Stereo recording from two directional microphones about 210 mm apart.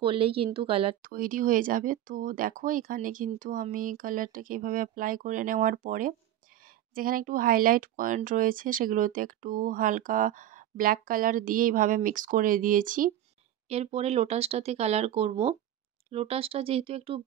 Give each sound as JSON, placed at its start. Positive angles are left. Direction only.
{"t": 0.0, "sound": "speech", "side_deg": -25}
{"t": 1.0, "sound": "speech", "side_deg": -40}
{"t": 13.7, "sound": "speech", "side_deg": -30}